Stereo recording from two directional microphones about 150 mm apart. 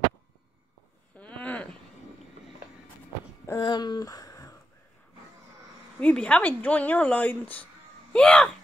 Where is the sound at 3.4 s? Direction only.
25° left (ahead or behind).